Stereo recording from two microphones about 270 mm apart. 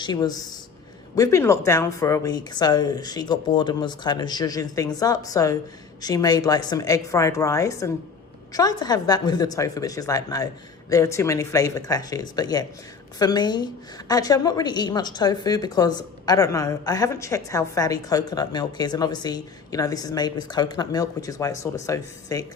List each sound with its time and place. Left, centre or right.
0.0 s a woman's voice: centre